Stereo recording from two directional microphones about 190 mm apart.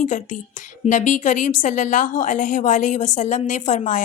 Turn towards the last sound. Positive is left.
turn(degrees=40)  # may be behind; listen again after turning